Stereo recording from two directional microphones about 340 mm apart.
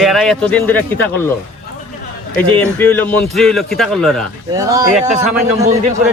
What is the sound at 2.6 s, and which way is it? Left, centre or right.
Speech, centre.